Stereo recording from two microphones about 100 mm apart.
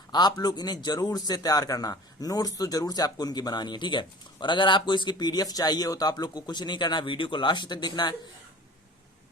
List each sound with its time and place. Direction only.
0.1 s a man's voice: 45° left (ahead or behind)